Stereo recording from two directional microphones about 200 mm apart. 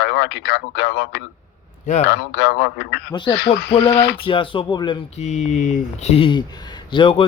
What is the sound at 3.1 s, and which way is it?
Speech, 20° left (ahead or behind).